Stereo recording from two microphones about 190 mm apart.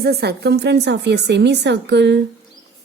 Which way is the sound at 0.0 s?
55° right (ahead or behind).